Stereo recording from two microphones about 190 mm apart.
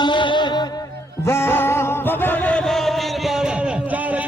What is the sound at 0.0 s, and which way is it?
Music, 25° left (ahead or behind).